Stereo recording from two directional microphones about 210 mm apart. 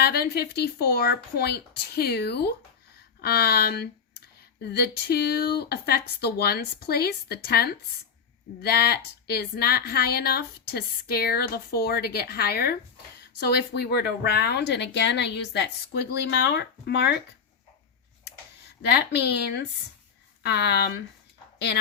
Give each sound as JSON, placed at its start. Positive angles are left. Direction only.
{"t": 0.0, "sound": "a woman's voice", "side_deg": 50}
{"t": 18.8, "sound": "a woman's voice", "side_deg": 50}